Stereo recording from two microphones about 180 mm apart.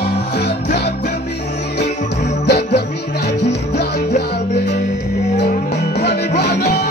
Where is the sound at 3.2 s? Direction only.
65° left (ahead or behind).